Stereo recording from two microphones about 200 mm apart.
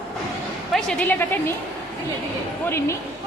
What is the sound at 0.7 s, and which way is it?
Speech, 5° left (ahead or behind).